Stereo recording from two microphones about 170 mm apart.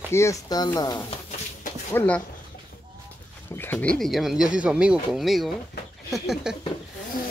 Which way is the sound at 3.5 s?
10° left (ahead or behind).